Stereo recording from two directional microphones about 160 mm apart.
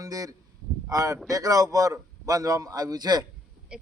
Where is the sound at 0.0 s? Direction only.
20° right (ahead or behind).